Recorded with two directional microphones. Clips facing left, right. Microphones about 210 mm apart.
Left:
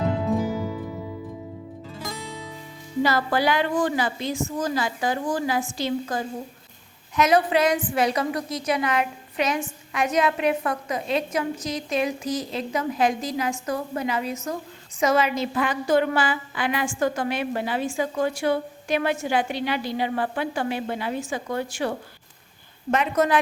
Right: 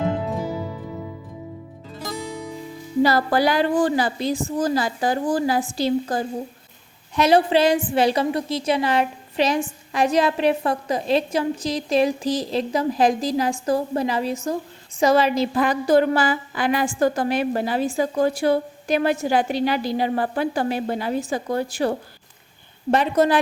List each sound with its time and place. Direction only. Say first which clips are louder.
3.0 s a woman's voice: right 4 dB; 35° right (ahead or behind)